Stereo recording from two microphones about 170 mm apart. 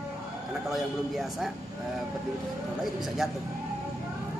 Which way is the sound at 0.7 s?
Centre (ahead or behind).